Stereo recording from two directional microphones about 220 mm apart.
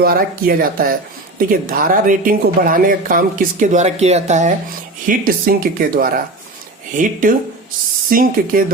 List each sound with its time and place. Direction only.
0.0 s speech: 40° right (ahead or behind)